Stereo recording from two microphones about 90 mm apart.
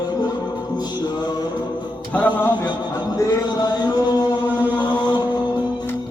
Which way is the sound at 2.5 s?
55° left (ahead or behind).